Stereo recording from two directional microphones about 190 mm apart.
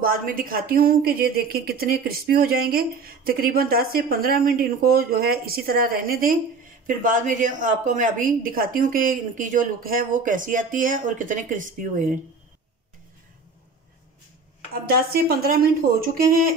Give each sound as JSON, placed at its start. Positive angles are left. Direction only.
{"t": 0.0, "sound": "speech", "side_deg": -50}
{"t": 14.9, "sound": "speech", "side_deg": -55}